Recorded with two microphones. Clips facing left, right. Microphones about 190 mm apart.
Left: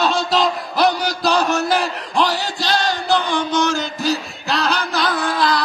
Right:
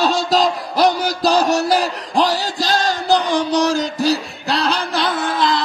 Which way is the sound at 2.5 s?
45° right (ahead or behind).